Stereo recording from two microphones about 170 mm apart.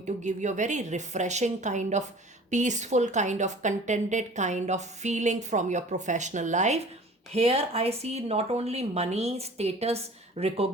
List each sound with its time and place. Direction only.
0.0 s a woman's voice: 45° right (ahead or behind)